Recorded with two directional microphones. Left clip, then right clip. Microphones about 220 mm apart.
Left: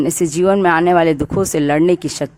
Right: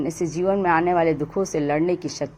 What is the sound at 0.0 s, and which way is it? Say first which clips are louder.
Speech: left 8 dB; 40° left (ahead or behind).